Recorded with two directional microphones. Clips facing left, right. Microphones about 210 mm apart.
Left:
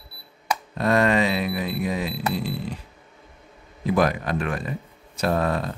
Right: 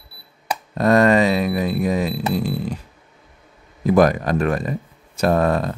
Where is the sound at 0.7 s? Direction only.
40° right (ahead or behind).